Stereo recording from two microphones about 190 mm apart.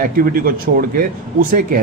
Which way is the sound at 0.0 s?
50° right (ahead or behind).